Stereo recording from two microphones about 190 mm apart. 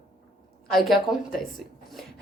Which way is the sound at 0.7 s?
Centre (ahead or behind).